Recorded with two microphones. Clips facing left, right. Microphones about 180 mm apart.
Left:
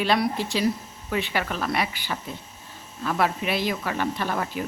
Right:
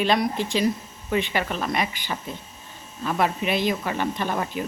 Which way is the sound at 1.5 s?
20° right (ahead or behind).